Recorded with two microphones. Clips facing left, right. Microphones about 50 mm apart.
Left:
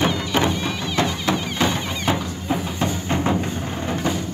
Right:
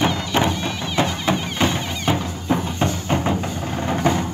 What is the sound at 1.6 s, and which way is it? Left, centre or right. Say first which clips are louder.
Music: even; centre.